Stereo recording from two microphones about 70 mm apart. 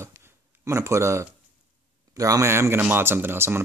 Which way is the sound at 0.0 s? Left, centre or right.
Right.